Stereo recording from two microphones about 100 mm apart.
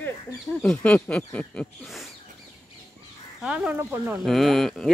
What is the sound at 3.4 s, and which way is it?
Speech, 10° right (ahead or behind).